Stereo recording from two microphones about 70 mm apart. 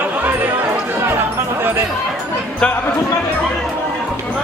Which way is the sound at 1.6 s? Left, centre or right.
Right.